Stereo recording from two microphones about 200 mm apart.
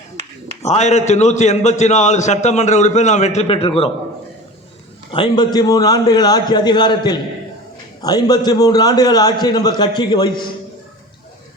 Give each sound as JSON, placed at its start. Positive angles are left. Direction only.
{"t": 0.2, "sound": "a sound", "side_deg": -35}
{"t": 0.6, "sound": "a man's voice", "side_deg": 35}
{"t": 5.1, "sound": "a man's voice", "side_deg": 25}